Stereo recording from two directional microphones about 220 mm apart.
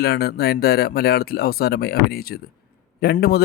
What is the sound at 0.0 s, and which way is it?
Speech, 45° left (ahead or behind).